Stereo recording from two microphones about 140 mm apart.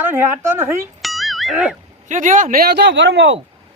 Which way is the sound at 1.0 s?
Centre (ahead or behind).